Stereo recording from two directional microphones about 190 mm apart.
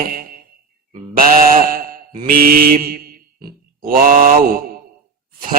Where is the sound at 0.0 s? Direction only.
50° right (ahead or behind).